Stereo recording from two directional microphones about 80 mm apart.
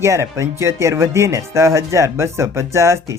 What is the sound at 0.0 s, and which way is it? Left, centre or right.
Speech, right.